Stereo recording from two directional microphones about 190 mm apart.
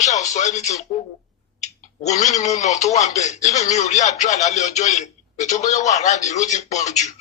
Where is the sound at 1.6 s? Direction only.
35° left (ahead or behind).